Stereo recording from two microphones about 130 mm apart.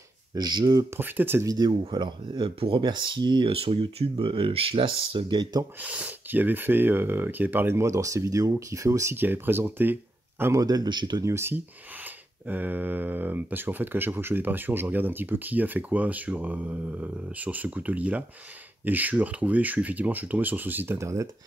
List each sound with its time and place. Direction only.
0.3 s speech: 35° right (ahead or behind)
0.9 s speech: 15° right (ahead or behind)
1.7 s speech: 35° right (ahead or behind)
5.8 s speech: 10° right (ahead or behind); by 11.2 s 35° right (ahead or behind)
11.2 s speech: 20° right (ahead or behind)